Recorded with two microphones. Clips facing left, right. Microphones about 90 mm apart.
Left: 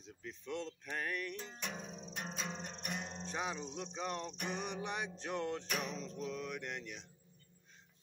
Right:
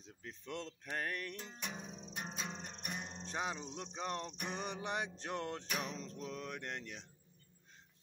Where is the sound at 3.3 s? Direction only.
30° right (ahead or behind).